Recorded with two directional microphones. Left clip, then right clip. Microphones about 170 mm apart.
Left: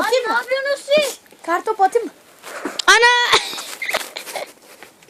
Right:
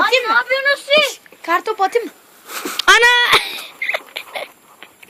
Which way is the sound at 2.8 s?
Centre (ahead or behind).